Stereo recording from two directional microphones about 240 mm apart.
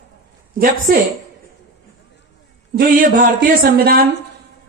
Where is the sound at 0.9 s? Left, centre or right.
Right.